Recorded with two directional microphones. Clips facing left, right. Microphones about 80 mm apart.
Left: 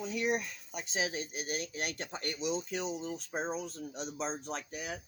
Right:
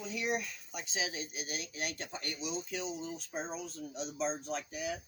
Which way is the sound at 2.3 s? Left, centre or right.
Left.